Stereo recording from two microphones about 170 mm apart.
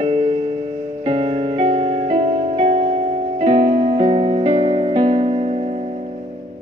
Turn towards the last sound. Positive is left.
turn(degrees=-35)  # may be behind; listen again after turning